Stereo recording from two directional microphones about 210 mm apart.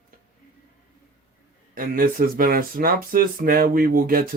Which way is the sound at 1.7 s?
45° right (ahead or behind).